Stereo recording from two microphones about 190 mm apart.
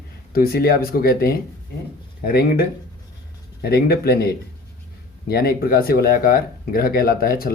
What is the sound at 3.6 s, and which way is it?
Speech, 55° left (ahead or behind).